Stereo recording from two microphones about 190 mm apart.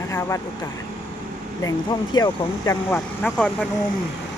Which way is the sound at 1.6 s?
20° left (ahead or behind).